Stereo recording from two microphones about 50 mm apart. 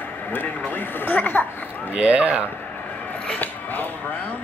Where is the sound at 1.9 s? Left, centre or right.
Right.